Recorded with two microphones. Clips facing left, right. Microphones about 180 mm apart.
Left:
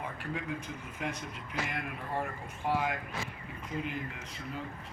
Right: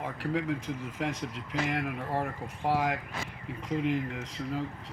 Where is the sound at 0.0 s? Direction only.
90° right.